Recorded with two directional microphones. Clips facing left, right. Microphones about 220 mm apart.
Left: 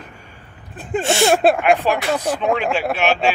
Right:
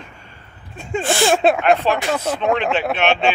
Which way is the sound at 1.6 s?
15° left (ahead or behind).